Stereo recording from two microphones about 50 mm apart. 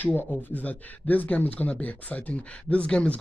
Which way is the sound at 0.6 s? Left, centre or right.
Left.